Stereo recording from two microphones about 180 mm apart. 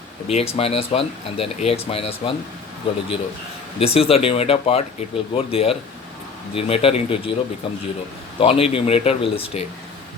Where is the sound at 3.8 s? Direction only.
35° left (ahead or behind).